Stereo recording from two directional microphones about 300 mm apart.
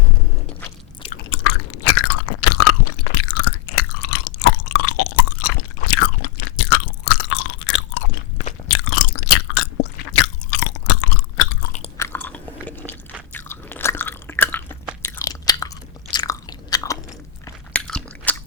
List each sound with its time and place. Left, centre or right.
1.3 s chewing: left
11.6 s chewing: left
11.9 s chewing: centre
13.3 s biting: centre
15.0 s chewing: centre
17.4 s biting: centre